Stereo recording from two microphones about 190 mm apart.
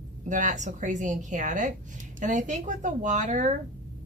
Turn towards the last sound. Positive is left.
turn(degrees=-40)  # may be behind; listen again after turning